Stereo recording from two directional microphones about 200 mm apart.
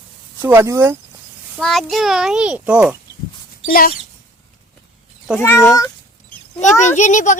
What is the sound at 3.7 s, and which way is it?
Speech, 45° left (ahead or behind).